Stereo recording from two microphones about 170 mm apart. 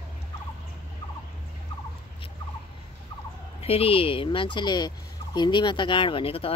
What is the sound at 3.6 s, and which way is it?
Speech, 35° left (ahead or behind).